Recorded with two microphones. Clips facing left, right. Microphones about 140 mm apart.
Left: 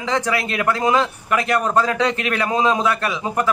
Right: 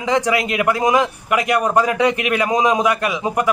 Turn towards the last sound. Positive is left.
turn(degrees=-15)  # may be behind; listen again after turning